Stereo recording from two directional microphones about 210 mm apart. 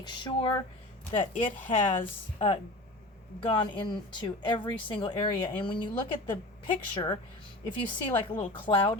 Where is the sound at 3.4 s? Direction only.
20° left (ahead or behind).